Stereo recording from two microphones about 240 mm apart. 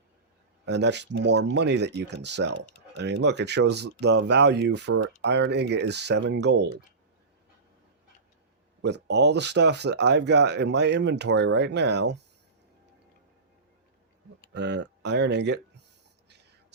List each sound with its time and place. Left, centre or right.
0.6 s speech: right
8.8 s speech: right
14.5 s speech: right